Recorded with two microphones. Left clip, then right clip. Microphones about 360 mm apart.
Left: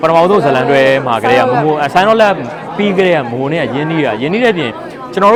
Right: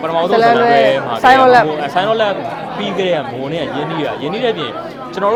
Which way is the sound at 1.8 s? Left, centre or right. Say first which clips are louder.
Left 6 dB; left.